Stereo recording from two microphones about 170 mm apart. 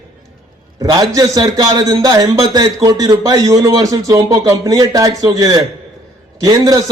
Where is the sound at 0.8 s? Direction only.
20° right (ahead or behind).